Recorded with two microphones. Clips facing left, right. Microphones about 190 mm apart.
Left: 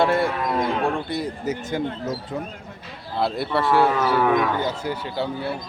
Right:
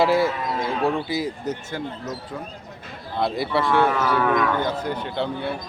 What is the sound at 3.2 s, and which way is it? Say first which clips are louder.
A man's voice: even; centre (ahead or behind).